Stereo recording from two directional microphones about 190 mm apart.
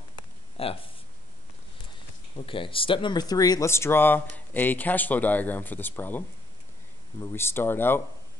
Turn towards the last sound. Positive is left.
turn(degrees=10)  # may be behind; listen again after turning